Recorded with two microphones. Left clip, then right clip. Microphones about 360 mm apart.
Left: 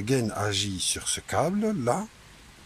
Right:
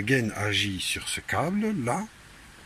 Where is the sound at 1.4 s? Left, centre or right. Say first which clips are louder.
Left 5 dB; left.